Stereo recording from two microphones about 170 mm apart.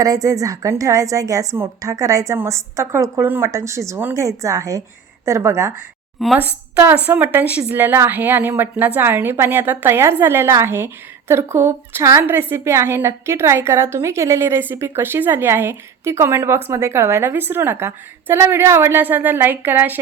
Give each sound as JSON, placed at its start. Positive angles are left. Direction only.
{"t": 0.0, "sound": "a woman's voice", "side_deg": -20}
{"t": 6.1, "sound": "a woman's voice", "side_deg": -5}